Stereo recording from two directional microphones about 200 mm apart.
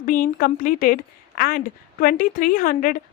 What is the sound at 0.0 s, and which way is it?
A woman's voice, 45° left (ahead or behind).